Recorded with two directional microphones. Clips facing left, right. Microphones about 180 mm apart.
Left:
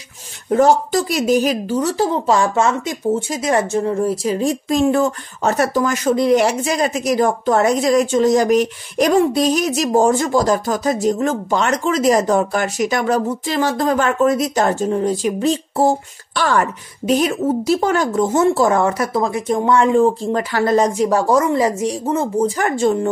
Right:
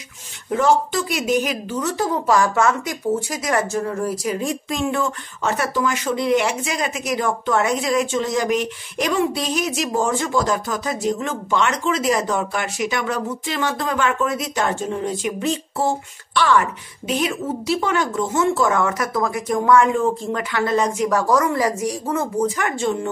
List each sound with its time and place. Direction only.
0.5 s a woman's voice: 40° left (ahead or behind)